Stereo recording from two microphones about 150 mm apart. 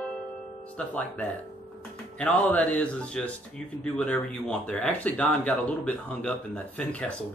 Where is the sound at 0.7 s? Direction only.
10° left (ahead or behind).